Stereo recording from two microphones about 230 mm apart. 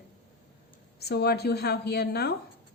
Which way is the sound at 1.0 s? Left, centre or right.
Left.